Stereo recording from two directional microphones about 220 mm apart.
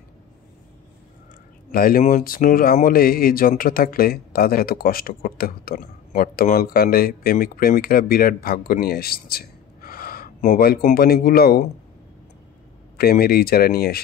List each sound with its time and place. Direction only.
1.7 s a man's voice: 40° left (ahead or behind)
12.9 s speech: 40° left (ahead or behind)